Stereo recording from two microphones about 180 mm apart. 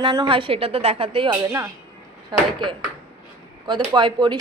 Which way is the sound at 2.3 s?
25° right (ahead or behind).